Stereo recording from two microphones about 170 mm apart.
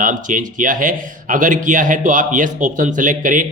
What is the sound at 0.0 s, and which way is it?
Speech, 50° right (ahead or behind).